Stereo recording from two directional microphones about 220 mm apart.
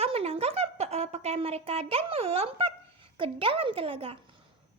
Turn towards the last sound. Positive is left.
turn(degrees=-25)  # may be behind; listen again after turning